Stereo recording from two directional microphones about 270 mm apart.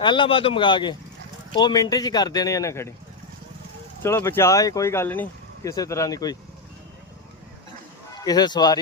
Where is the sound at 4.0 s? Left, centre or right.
Centre.